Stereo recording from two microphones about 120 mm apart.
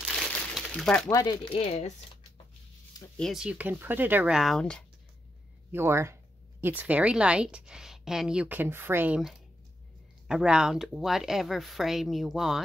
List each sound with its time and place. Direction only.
0.1 s crumpling: 5° left (ahead or behind)
0.7 s speech: 5° left (ahead or behind)
1.1 s speech: 35° left (ahead or behind)
1.5 s speech: 55° left (ahead or behind)
3.2 s speech: centre (ahead or behind)
3.4 s a woman's voice: 10° right (ahead or behind)
4.4 s speech: 5° left (ahead or behind)
5.7 s a woman's voice: 20° right (ahead or behind)
10.2 s speech: 5° right (ahead or behind)